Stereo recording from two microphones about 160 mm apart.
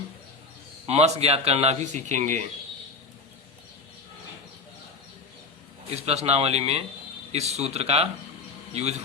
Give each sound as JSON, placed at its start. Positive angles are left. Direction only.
{"t": 0.9, "sound": "a man's voice", "side_deg": -40}
{"t": 6.0, "sound": "a man's voice", "side_deg": -40}